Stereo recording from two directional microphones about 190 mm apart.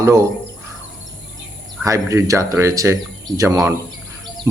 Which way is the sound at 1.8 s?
15° right (ahead or behind).